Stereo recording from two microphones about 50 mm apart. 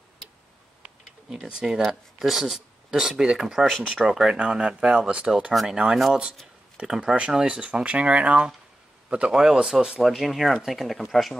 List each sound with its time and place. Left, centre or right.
1.3 s speech: centre
6.4 s a sound: centre
7.4 s speech: right
10.0 s speech: centre